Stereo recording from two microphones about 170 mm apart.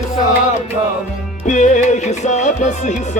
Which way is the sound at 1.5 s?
45° left (ahead or behind).